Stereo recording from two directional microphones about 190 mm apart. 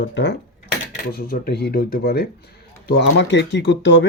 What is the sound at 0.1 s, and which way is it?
Speech, 65° left (ahead or behind).